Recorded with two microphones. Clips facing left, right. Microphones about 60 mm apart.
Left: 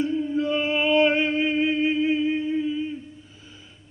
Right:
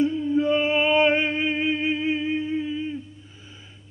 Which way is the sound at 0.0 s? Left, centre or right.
Right.